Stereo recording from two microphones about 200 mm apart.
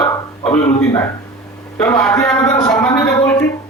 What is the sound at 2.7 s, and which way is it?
Speech, 15° left (ahead or behind).